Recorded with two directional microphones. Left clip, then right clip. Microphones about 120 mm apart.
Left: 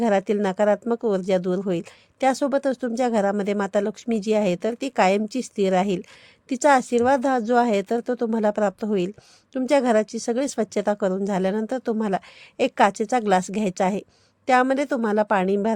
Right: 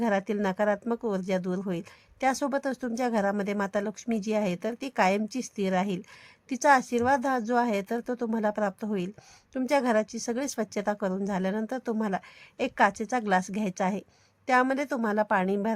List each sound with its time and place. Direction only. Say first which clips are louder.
0.0 s a woman's voice: left 6 dB; 40° left (ahead or behind)